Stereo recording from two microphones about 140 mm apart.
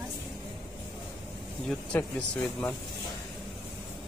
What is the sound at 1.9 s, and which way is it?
Speech, 15° left (ahead or behind).